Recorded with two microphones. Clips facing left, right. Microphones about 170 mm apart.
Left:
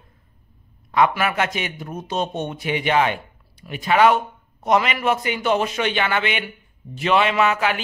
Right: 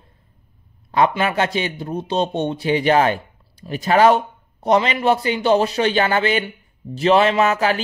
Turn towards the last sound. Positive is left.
turn(degrees=-35)  # may be behind; listen again after turning